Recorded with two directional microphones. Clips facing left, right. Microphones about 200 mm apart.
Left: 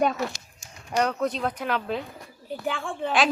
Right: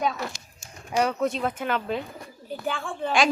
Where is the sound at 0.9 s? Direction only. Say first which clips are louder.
Right 1 dB; 5° right (ahead or behind).